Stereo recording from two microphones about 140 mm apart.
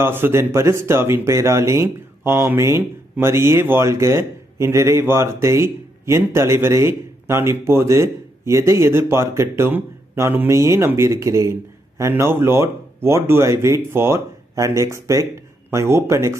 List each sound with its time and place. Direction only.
0.0 s speech: 15° right (ahead or behind)